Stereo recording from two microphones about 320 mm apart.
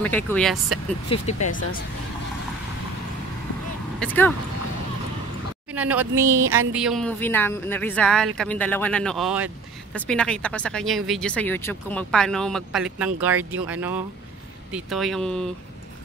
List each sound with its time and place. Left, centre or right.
0.0 s speech: centre
1.0 s speech: centre
4.0 s speech: centre
5.8 s speech: centre